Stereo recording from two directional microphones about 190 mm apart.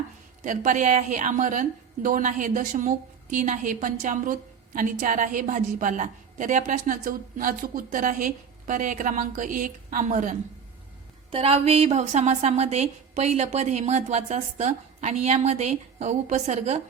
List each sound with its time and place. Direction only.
0.4 s a woman's voice: 40° right (ahead or behind)
11.3 s a woman's voice: 30° right (ahead or behind)